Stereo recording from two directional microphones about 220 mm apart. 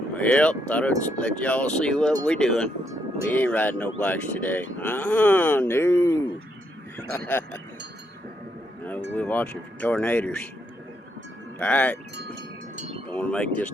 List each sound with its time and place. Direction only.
0.2 s speech: 5° left (ahead or behind)
9.1 s speech: 5° left (ahead or behind)
11.6 s speech: 5° left (ahead or behind)
12.1 s speech: 50° right (ahead or behind)
12.7 s wind chime: 30° right (ahead or behind)
13.1 s speech: 5° left (ahead or behind)